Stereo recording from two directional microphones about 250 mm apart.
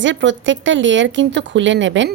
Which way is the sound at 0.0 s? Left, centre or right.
Right.